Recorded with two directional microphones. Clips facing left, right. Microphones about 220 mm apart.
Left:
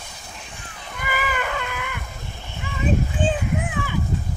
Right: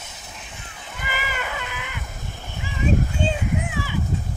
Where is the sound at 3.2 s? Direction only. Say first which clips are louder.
Left 1 dB; 50° left (ahead or behind).